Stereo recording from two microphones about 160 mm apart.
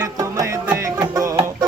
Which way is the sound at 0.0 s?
20° right (ahead or behind).